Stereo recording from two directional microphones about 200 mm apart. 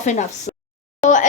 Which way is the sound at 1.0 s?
40° left (ahead or behind).